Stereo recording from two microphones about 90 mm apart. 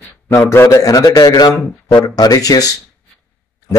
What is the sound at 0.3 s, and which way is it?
Speech, 30° left (ahead or behind).